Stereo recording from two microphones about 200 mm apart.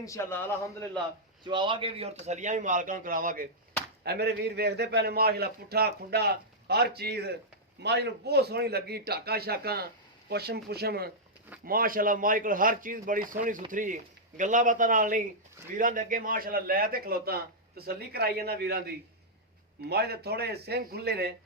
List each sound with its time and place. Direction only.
0.0 s a man's voice: 15° left (ahead or behind)
1.5 s a man's voice: 25° right (ahead or behind); by 21.3 s 55° right (ahead or behind)